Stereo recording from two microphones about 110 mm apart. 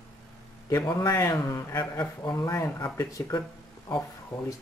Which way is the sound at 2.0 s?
35° left (ahead or behind).